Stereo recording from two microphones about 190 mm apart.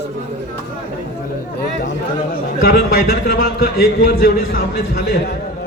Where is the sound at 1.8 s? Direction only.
55° left (ahead or behind).